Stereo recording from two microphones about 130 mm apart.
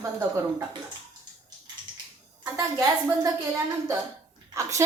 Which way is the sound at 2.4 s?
30° right (ahead or behind).